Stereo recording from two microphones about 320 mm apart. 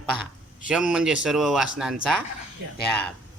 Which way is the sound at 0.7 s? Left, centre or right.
Centre.